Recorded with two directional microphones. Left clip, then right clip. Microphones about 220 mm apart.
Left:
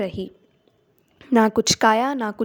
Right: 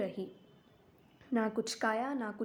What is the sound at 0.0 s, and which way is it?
Speech, 40° left (ahead or behind).